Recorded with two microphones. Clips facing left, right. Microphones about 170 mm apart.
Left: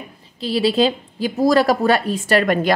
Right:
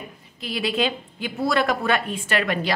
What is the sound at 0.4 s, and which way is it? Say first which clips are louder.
A woman's voice: left 7 dB; 30° left (ahead or behind).